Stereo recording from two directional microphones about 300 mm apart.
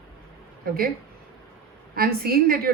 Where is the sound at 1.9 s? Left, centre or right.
Right.